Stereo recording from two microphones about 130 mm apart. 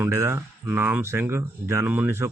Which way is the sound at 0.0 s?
20° right (ahead or behind).